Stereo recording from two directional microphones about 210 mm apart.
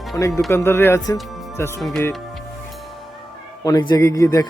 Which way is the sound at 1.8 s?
Centre (ahead or behind).